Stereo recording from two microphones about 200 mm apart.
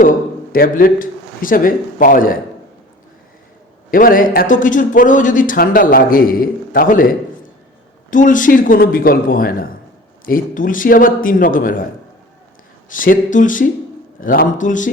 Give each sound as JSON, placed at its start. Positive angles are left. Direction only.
{"t": 0.0, "sound": "a man's voice", "side_deg": 45}
{"t": 3.9, "sound": "a man's voice", "side_deg": 45}
{"t": 12.9, "sound": "speech", "side_deg": 40}